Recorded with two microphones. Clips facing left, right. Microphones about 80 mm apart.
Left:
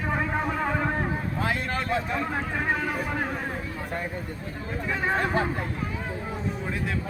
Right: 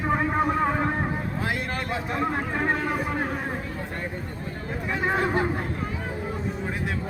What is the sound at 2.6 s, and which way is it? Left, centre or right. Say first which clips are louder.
Vehicle: right 3 dB; centre.